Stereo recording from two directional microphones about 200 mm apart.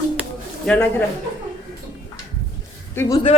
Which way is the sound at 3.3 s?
30° left (ahead or behind).